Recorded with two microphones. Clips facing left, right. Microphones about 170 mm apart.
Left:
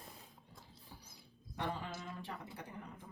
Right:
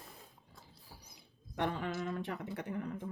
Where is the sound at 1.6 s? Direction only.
65° right (ahead or behind).